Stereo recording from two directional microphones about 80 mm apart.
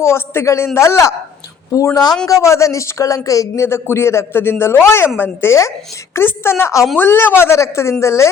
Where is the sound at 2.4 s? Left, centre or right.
Left.